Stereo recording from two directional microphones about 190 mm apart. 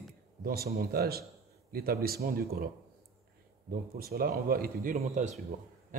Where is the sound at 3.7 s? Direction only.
50° right (ahead or behind).